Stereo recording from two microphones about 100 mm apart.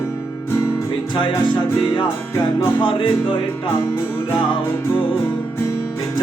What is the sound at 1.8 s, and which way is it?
Music, 60° left (ahead or behind).